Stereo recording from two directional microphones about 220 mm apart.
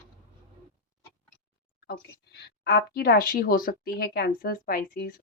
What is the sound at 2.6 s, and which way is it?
Speech, 45° left (ahead or behind).